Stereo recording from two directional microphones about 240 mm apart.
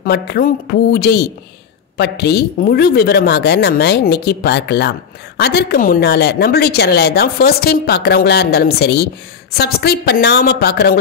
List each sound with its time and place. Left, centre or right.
0.0 s a woman's voice: left